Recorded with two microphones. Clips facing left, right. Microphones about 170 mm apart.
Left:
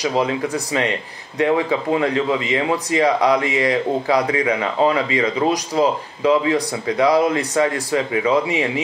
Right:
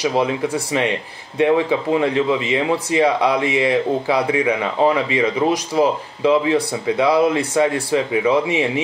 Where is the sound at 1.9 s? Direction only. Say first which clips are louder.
Right 1 dB; 25° right (ahead or behind).